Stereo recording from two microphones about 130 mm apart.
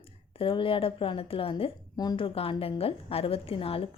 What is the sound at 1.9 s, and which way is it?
Speech, 30° left (ahead or behind).